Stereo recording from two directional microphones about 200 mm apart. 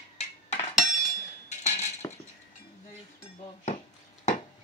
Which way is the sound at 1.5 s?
35° left (ahead or behind).